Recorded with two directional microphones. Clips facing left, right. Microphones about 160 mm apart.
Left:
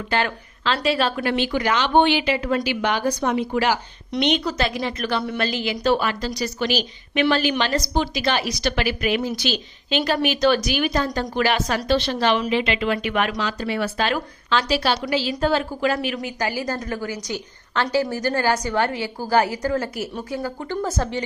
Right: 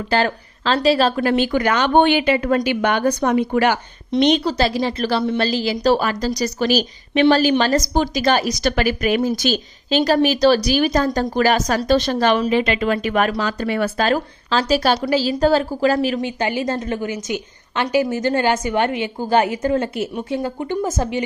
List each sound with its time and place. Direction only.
0.1 s a woman's voice: 35° right (ahead or behind); by 3.8 s 55° right (ahead or behind)
4.2 s a woman's voice: 35° right (ahead or behind); by 21.2 s 15° right (ahead or behind)